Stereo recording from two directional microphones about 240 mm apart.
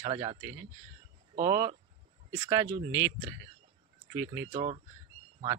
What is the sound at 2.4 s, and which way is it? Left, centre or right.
Speech, centre.